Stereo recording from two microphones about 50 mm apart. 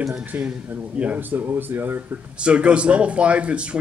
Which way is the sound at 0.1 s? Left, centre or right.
Right.